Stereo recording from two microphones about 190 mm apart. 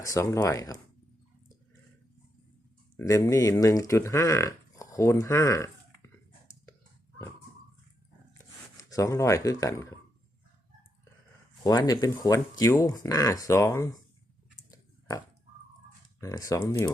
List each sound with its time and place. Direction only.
0.0 s speech: 15° left (ahead or behind)
3.0 s speech: 15° left (ahead or behind)
8.4 s speech: 15° left (ahead or behind)
11.6 s speech: 20° left (ahead or behind)
14.7 s pig: 20° left (ahead or behind)
16.2 s speech: 15° left (ahead or behind)